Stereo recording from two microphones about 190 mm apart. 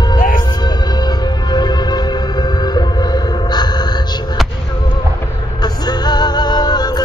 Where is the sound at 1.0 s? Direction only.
20° left (ahead or behind).